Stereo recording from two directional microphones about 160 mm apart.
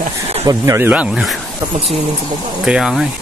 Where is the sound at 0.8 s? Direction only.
5° right (ahead or behind).